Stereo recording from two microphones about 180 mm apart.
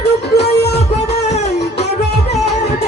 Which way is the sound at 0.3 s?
65° left (ahead or behind).